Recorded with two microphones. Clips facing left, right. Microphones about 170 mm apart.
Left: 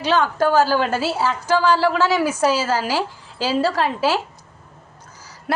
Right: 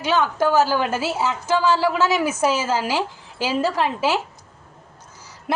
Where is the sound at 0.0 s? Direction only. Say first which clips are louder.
Left 1 dB; 15° right (ahead or behind).